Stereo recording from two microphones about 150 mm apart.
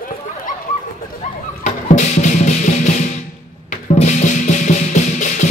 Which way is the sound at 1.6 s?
50° left (ahead or behind).